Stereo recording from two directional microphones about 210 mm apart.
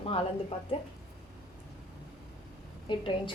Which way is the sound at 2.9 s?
25° left (ahead or behind).